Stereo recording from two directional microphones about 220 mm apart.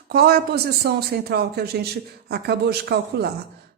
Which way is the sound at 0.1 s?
45° right (ahead or behind).